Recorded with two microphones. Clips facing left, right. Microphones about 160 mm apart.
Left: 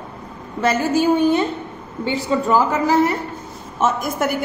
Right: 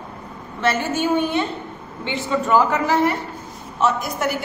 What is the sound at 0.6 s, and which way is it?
A woman's voice, 40° left (ahead or behind).